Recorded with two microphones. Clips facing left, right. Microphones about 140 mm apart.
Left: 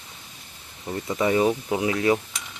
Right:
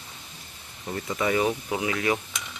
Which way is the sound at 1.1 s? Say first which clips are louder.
Left 4 dB; 30° left (ahead or behind).